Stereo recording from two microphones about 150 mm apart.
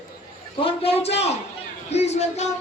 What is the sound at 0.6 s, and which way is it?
A man's voice, 40° left (ahead or behind).